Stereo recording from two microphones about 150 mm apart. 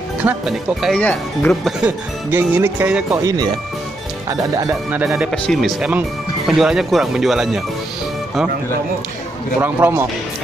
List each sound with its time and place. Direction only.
0.2 s speech: 10° right (ahead or behind)
0.9 s speech: 10° left (ahead or behind)
1.9 s speech: 15° right (ahead or behind)
3.3 s speech: 25° right (ahead or behind)
4.9 s speech: 10° right (ahead or behind)
5.3 s speech: centre (ahead or behind)
9.6 s speech: 15° right (ahead or behind)